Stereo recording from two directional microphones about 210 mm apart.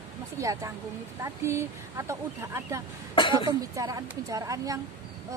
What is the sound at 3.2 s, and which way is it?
Speech, 20° left (ahead or behind).